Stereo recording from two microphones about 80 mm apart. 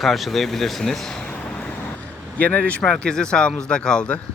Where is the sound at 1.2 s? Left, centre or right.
Centre.